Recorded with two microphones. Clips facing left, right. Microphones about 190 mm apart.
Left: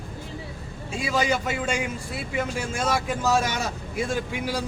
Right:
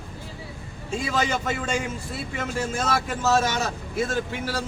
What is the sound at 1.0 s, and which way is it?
A man's voice, 10° left (ahead or behind).